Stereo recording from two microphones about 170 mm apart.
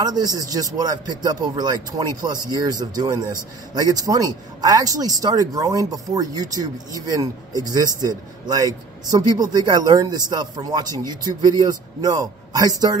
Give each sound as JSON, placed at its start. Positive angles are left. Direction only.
{"t": 0.0, "sound": "speech", "side_deg": -25}